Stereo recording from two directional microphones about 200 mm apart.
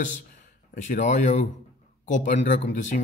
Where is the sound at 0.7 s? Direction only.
40° left (ahead or behind).